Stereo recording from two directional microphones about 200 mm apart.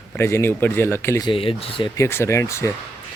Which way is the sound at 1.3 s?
25° left (ahead or behind).